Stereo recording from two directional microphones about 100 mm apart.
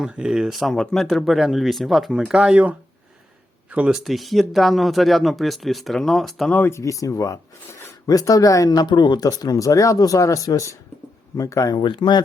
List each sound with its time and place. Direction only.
0.0 s speech: 5° right (ahead or behind)
4.0 s speech: centre (ahead or behind)
6.5 s speech: 20° left (ahead or behind)
11.7 s speech: 55° left (ahead or behind)